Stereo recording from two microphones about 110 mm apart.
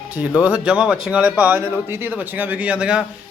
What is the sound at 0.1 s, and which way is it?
A man's voice, 15° right (ahead or behind).